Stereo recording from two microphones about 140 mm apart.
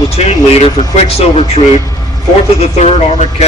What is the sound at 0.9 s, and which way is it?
Speech, 45° left (ahead or behind).